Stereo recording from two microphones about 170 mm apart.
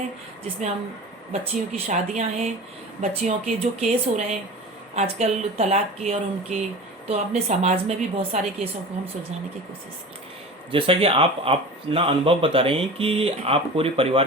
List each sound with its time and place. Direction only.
1.3 s speech: 40° right (ahead or behind)
10.7 s speech: 30° right (ahead or behind)